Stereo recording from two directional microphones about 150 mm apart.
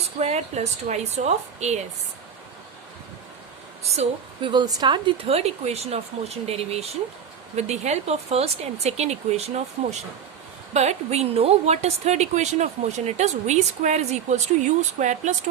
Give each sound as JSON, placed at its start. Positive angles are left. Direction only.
{"t": 0.2, "sound": "a woman's voice", "side_deg": -45}
{"t": 3.9, "sound": "a woman's voice", "side_deg": -40}
{"t": 10.8, "sound": "a woman's voice", "side_deg": -45}